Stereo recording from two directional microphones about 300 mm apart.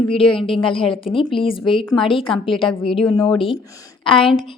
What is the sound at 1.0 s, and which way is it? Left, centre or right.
Speech, centre.